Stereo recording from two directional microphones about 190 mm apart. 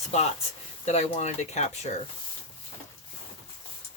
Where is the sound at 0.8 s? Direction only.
35° left (ahead or behind).